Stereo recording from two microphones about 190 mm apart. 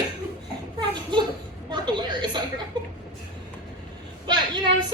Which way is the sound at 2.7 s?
25° right (ahead or behind).